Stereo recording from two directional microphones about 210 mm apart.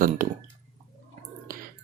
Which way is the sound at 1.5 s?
40° right (ahead or behind).